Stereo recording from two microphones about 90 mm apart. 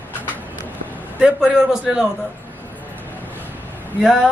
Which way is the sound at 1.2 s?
10° right (ahead or behind).